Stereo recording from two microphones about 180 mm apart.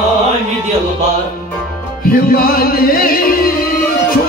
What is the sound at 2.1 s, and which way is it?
Music, 55° left (ahead or behind).